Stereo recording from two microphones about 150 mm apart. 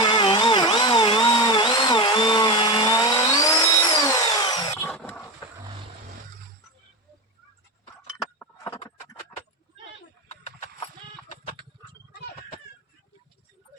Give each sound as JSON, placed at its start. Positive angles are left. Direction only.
{"t": 0.0, "sound": "tools", "side_deg": 30}
{"t": 4.9, "sound": "dog", "side_deg": 10}